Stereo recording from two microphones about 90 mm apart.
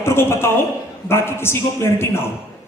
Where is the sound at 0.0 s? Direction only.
30° left (ahead or behind).